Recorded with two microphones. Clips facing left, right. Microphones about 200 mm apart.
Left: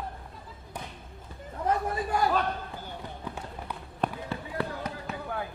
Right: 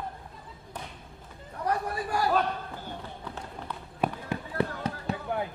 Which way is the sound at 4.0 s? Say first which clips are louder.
Right 1 dB; 15° right (ahead or behind).